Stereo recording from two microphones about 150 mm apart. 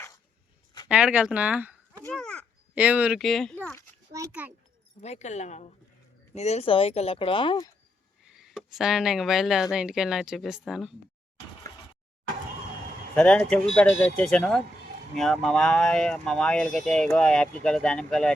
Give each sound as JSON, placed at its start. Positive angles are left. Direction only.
{"t": 0.9, "sound": "speech", "side_deg": -5}
{"t": 2.1, "sound": "caw", "side_deg": 5}
{"t": 2.7, "sound": "speech", "side_deg": -10}
{"t": 3.2, "sound": "speech", "side_deg": 0}
{"t": 3.5, "sound": "speech", "side_deg": 10}
{"t": 4.3, "sound": "speech", "side_deg": -10}
{"t": 4.9, "sound": "speech", "side_deg": 45}
{"t": 8.2, "sound": "speech", "side_deg": -5}
{"t": 13.1, "sound": "speech", "side_deg": 10}